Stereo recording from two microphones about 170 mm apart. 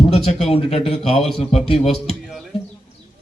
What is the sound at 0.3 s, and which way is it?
A man's voice, 35° left (ahead or behind).